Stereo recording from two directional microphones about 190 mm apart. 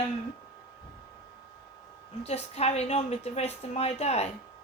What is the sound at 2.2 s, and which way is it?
A woman's voice, 35° left (ahead or behind).